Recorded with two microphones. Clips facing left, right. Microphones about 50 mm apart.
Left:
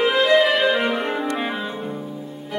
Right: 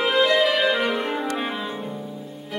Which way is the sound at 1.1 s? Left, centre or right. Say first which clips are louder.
Left 2 dB; centre.